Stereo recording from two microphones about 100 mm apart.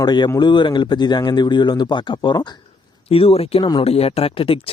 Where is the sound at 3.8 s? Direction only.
90° left; by 4.7 s 70° left (ahead or behind).